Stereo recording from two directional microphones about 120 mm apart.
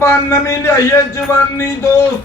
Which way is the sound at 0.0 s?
25° left (ahead or behind).